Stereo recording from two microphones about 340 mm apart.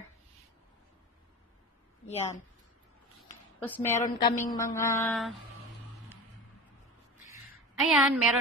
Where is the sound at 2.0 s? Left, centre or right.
Centre.